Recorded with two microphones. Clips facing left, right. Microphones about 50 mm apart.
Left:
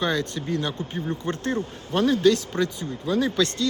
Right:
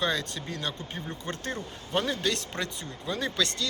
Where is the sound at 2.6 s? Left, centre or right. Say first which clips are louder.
Left 8 dB; centre.